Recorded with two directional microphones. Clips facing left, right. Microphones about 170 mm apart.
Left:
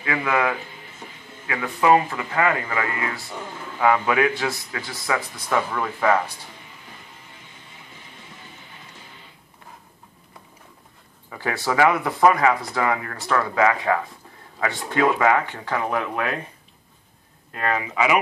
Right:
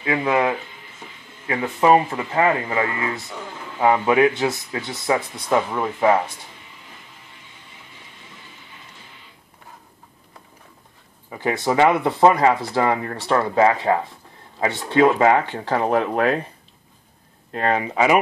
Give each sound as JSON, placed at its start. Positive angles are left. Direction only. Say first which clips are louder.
{"t": 0.0, "sound": "speech", "louder": "right 3 dB", "side_deg": -25}
{"t": 11.2, "sound": "speech", "louder": "right 4 dB", "side_deg": -20}
{"t": 17.5, "sound": "speech", "louder": "right 4 dB", "side_deg": -35}